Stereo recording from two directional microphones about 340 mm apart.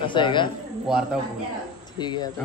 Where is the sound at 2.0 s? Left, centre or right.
Centre.